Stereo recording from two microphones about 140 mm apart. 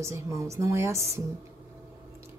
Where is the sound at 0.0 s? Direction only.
20° right (ahead or behind).